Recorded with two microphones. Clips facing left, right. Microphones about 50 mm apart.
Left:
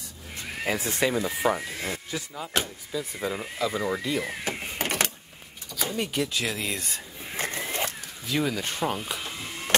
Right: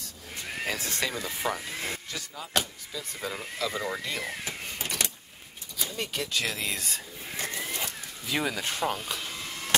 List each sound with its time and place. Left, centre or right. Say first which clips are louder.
0.7 s speech: left 7 dB; centre
4.5 s vehicle: left 6 dB; left
5.9 s speech: left 3 dB; centre
7.3 s a sound: left 4 dB; left
8.3 s speech: left 2 dB; centre